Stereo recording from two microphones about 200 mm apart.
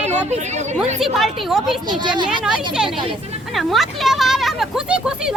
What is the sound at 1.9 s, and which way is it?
Speech, 20° right (ahead or behind).